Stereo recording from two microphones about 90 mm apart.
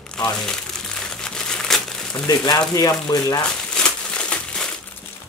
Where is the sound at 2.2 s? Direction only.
50° left (ahead or behind).